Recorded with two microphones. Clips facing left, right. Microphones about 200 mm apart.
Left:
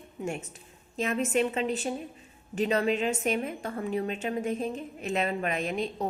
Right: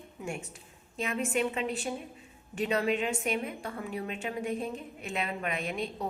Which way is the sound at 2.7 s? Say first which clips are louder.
Left 2 dB; 40° left (ahead or behind).